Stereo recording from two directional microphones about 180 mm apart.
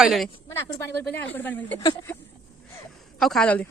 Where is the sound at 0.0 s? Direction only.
Centre (ahead or behind).